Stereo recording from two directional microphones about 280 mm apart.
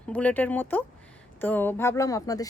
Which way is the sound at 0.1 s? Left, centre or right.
Centre.